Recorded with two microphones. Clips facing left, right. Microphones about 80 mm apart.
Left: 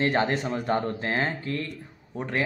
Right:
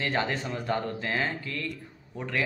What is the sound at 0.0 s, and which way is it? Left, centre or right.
A man's voice, left.